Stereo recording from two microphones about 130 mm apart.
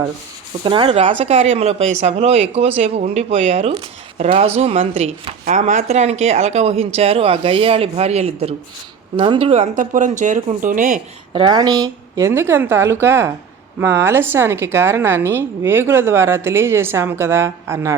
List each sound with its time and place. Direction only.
0.6 s speech: 40° right (ahead or behind)
9.6 s speech: 80° right
11.3 s a woman's voice: 35° right (ahead or behind)